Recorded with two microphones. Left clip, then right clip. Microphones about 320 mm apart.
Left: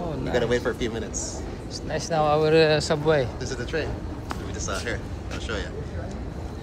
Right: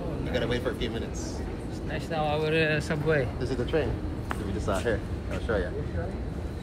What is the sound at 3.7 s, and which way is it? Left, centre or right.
Speech, right.